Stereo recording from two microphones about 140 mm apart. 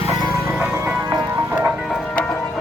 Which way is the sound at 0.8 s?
15° right (ahead or behind).